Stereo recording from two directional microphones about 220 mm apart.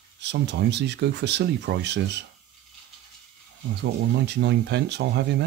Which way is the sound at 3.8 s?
50° right (ahead or behind).